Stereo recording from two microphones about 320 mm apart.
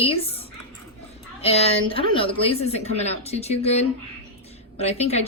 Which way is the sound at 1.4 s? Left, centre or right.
Centre.